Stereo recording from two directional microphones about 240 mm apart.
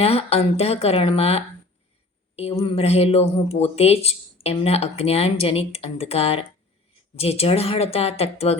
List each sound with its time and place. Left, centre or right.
0.0 s speech: left